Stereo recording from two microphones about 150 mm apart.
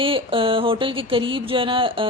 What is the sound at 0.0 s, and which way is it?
Speech, 35° right (ahead or behind).